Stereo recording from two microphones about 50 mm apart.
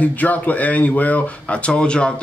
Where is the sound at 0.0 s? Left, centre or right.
Left.